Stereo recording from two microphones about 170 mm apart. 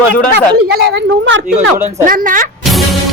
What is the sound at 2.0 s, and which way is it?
Speech, 50° right (ahead or behind).